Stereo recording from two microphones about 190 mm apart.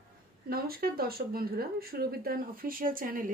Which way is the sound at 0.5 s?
50° right (ahead or behind).